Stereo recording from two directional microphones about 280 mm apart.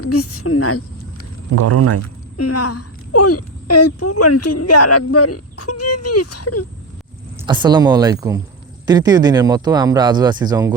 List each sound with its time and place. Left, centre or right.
0.0 s a woman's voice: left
1.5 s speech: right
2.4 s speech: left
7.3 s speech: centre